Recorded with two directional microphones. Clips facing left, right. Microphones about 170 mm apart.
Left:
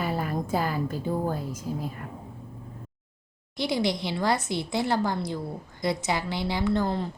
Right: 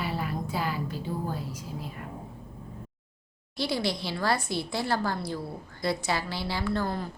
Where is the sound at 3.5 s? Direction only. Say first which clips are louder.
Left 3 dB; 20° left (ahead or behind).